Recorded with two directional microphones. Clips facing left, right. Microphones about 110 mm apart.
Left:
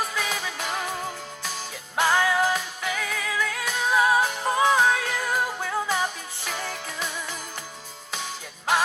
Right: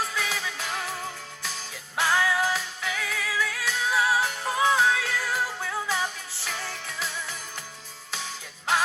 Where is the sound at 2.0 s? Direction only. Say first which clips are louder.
Left 3 dB; 50° left (ahead or behind).